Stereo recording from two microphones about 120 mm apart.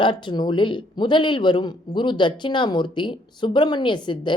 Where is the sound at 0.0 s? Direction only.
40° left (ahead or behind).